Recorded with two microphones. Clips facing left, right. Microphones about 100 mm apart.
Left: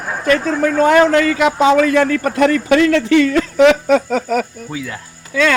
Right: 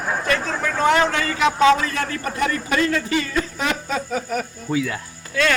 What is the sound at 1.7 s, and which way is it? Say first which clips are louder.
A man's voice: left 12 dB; 65° left (ahead or behind).